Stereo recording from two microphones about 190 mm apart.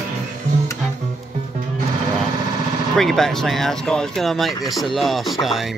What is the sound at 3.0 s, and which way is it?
Speech, centre (ahead or behind).